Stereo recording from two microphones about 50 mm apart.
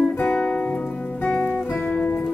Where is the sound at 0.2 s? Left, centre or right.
Left.